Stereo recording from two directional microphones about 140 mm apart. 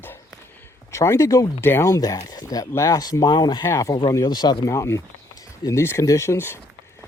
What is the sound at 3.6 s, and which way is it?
Speech, 20° left (ahead or behind).